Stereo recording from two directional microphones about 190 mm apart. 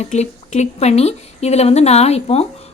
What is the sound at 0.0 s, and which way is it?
A woman's voice, 35° left (ahead or behind).